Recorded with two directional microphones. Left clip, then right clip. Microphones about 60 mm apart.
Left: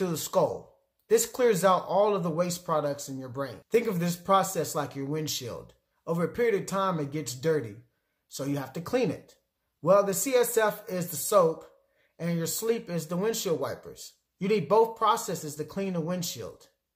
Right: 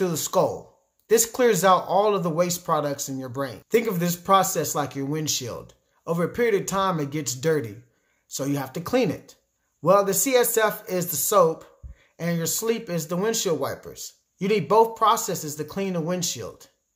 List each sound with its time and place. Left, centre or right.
0.0 s speech: right